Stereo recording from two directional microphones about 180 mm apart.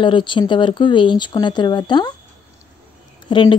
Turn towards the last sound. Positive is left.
turn(degrees=25)  # may be behind; listen again after turning